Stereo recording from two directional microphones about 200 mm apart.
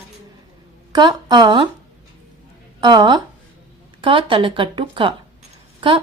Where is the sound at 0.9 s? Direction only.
20° right (ahead or behind).